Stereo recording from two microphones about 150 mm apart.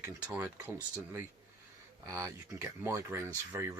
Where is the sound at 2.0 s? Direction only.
20° right (ahead or behind).